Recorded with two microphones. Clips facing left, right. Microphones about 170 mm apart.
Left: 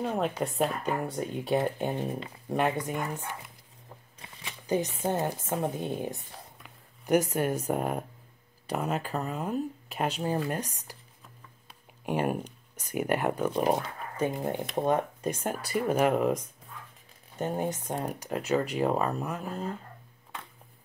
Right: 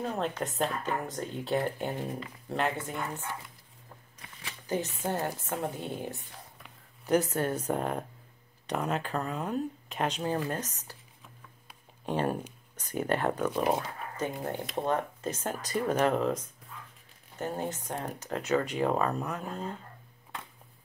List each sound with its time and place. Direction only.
0.1 s speech: 10° left (ahead or behind); by 2.3 s 25° left (ahead or behind)
2.5 s speech: 15° left (ahead or behind)
12.1 s speech: 10° left (ahead or behind)